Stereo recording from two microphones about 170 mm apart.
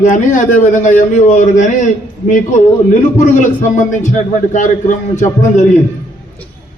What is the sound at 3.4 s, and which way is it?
A man's voice, 45° left (ahead or behind).